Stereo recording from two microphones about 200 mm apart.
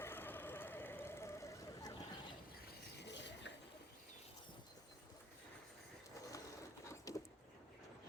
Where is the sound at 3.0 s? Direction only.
60° left (ahead or behind).